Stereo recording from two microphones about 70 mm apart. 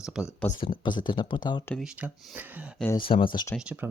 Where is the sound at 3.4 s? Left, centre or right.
Left.